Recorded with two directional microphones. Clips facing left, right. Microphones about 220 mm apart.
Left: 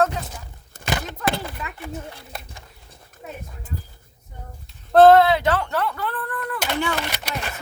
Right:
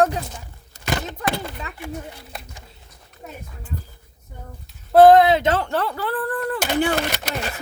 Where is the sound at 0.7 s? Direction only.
55° left (ahead or behind).